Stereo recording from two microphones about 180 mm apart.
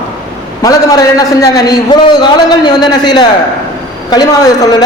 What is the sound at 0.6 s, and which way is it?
A man's voice, 20° left (ahead or behind).